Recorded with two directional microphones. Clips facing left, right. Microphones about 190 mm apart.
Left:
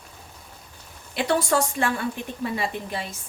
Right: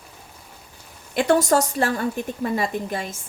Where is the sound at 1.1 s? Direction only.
45° right (ahead or behind).